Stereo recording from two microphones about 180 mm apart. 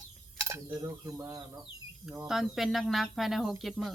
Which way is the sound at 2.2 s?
Centre (ahead or behind).